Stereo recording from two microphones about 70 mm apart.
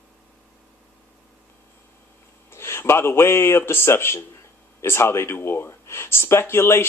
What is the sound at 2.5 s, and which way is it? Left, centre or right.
A man's voice, left.